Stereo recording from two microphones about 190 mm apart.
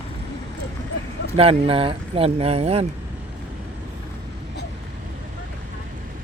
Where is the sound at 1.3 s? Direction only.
30° right (ahead or behind).